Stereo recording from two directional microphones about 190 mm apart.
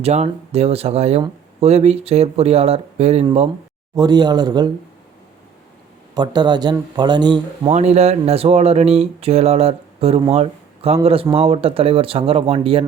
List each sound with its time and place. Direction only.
0.0 s speech: 35° right (ahead or behind)
3.9 s speech: 20° right (ahead or behind)
6.1 s speech: 20° right (ahead or behind)
7.7 s speech: 35° right (ahead or behind)